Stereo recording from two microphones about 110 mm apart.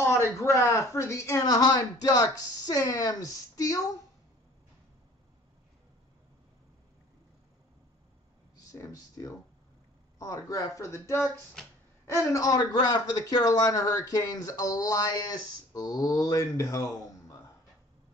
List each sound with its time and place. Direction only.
0.0 s a man's voice: 25° left (ahead or behind)
8.5 s a man's voice: 30° left (ahead or behind)